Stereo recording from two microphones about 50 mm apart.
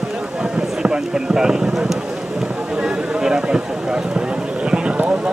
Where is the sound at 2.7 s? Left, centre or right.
Right.